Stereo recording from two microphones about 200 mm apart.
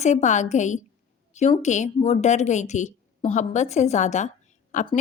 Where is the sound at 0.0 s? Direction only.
35° left (ahead or behind).